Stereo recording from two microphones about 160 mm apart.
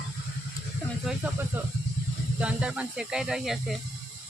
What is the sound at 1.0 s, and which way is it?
Speech, centre (ahead or behind).